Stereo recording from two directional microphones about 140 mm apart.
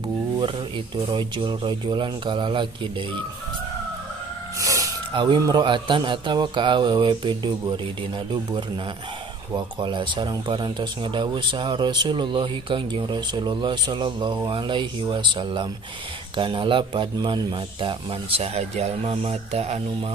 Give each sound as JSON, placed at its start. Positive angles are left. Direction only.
{"t": 1.0, "sound": "speech", "side_deg": -35}
{"t": 4.6, "sound": "a sound", "side_deg": -25}
{"t": 5.1, "sound": "speech", "side_deg": -35}